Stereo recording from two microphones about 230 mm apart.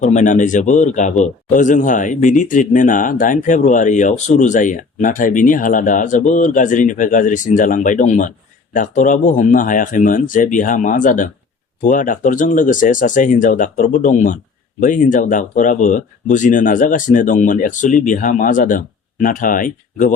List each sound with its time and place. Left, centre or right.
0.0 s a man's voice: left